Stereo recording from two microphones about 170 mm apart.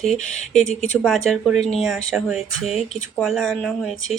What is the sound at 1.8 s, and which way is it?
Speech, centre (ahead or behind).